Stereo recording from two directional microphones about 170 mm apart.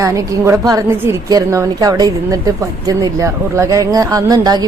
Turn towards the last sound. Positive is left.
turn(degrees=-20)  # may be behind; listen again after turning